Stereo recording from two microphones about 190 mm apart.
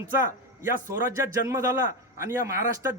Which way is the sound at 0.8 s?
15° right (ahead or behind).